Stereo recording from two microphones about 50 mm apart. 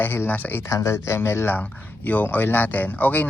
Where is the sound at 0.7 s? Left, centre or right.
Left.